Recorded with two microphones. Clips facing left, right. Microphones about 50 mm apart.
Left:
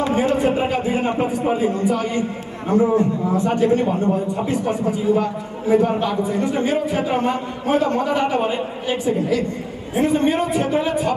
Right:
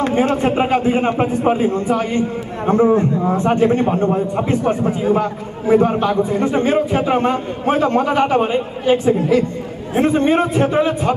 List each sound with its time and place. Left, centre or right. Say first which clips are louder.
0.0 s a man's voice: right 2 dB; right